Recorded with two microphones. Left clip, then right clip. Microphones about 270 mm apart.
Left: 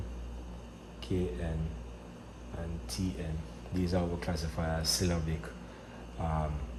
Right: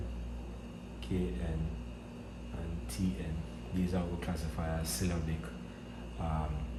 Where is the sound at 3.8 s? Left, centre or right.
Left.